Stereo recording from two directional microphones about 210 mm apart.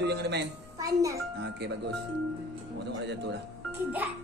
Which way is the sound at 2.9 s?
55° right (ahead or behind).